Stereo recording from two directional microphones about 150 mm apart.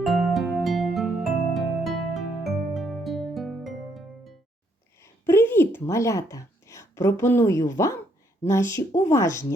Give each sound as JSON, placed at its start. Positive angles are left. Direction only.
{"t": 0.0, "sound": "music", "side_deg": 0}
{"t": 5.0, "sound": "a sound", "side_deg": 15}
{"t": 8.4, "sound": "speech", "side_deg": 20}